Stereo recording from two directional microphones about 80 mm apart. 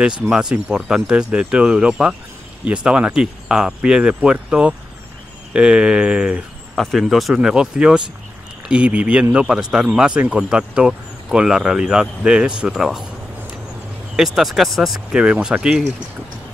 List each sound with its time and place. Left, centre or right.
0.3 s speech: centre
6.7 s speech: centre
14.1 s speech: centre